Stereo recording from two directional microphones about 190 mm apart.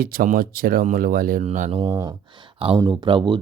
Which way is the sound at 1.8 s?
20° right (ahead or behind).